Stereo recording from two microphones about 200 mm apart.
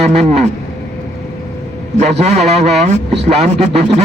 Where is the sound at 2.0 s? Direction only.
35° right (ahead or behind).